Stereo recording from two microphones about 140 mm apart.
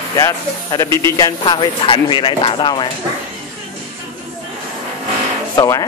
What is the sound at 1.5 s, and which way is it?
Speech, 35° left (ahead or behind).